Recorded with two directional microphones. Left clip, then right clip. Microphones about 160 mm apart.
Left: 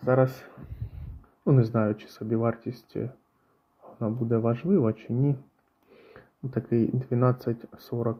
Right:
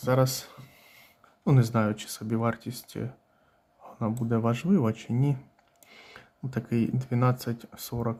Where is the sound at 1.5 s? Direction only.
25° right (ahead or behind).